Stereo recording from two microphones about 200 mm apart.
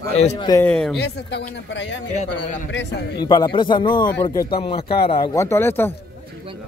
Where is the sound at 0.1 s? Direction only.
35° left (ahead or behind).